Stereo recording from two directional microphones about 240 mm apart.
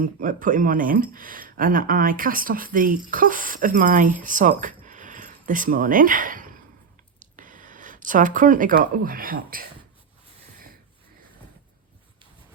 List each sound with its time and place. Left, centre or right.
0.0 s speech: right